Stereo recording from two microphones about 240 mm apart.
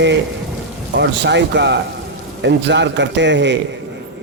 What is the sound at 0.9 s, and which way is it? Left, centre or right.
Speech, right.